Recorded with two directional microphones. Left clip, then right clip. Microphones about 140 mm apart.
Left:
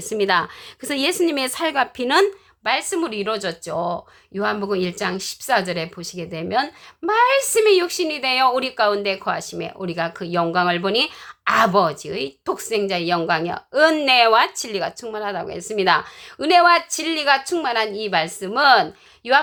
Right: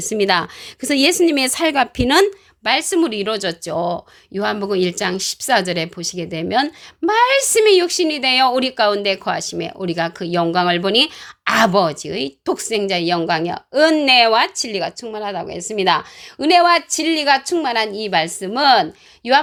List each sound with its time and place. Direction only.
0.0 s a woman's voice: 35° right (ahead or behind)